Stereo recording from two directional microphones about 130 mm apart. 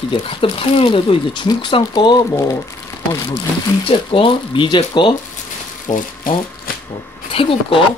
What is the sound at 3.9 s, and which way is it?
Speech, 40° left (ahead or behind).